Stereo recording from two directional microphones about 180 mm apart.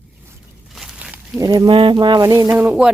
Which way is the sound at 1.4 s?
20° right (ahead or behind).